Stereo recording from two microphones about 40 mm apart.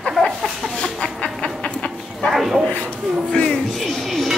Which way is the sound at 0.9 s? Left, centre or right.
Left.